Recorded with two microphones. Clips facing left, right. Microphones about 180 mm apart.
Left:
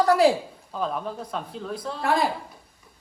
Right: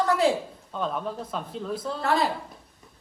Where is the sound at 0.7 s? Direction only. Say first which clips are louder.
Left 1 dB; centre (ahead or behind).